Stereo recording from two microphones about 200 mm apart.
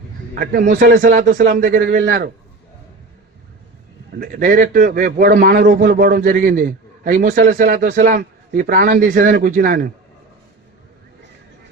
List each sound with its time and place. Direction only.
0.3 s a man's voice: 45° right (ahead or behind)
4.2 s a man's voice: 45° right (ahead or behind)